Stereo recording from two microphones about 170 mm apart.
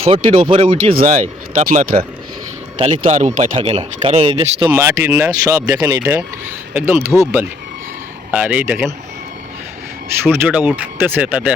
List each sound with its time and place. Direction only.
0.0 s speech: 35° right (ahead or behind)
0.9 s speech: 45° right (ahead or behind)
3.0 s speech: 45° right (ahead or behind)
4.7 s speech: 15° right (ahead or behind)
10.2 s speech: 10° right (ahead or behind)